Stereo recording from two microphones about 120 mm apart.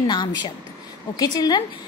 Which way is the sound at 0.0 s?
35° left (ahead or behind).